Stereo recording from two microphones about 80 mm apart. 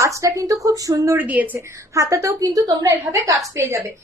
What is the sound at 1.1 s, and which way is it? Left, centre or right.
Speech, right.